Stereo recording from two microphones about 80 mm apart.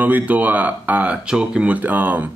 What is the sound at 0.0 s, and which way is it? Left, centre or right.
A man's voice, centre.